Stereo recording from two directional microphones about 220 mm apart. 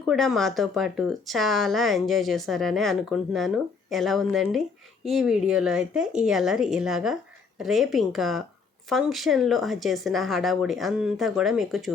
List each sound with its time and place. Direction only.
0.1 s a woman's voice: centre (ahead or behind)